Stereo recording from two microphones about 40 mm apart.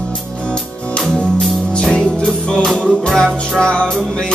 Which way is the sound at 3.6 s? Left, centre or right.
Left.